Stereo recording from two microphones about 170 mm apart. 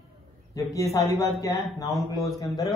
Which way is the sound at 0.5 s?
20° left (ahead or behind).